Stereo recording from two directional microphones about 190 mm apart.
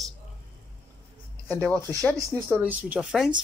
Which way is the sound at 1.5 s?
10° left (ahead or behind).